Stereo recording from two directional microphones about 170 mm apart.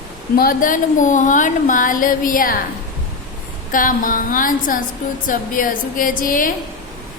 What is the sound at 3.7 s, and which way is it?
Speech, 55° left (ahead or behind).